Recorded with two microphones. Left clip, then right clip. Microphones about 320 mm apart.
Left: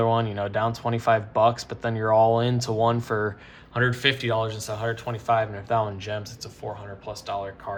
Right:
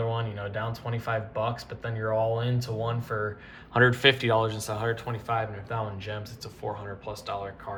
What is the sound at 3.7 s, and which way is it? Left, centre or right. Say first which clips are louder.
Speech: right 2 dB; centre.